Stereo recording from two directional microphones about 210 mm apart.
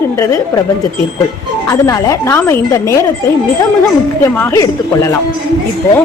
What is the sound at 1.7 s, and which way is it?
A woman's voice, 15° left (ahead or behind).